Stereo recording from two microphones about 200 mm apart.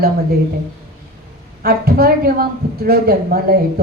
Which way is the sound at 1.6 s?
50° right (ahead or behind).